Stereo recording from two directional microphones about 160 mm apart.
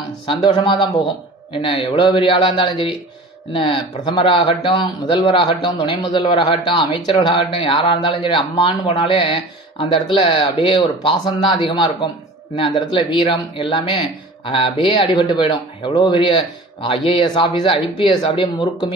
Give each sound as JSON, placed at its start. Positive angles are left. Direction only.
{"t": 0.3, "sound": "a man's voice", "side_deg": 30}